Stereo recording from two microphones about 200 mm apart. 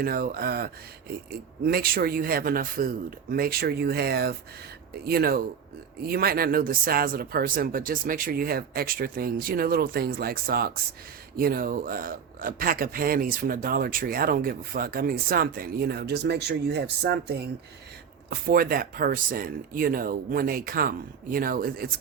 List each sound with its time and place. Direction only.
0.0 s speech: 45° right (ahead or behind)